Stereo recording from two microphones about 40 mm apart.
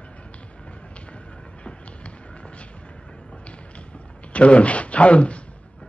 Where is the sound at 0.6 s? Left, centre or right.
Left.